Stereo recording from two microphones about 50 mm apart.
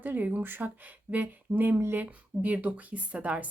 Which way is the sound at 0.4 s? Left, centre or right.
Right.